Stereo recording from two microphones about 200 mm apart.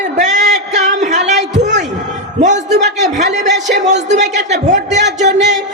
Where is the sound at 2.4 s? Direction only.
35° right (ahead or behind).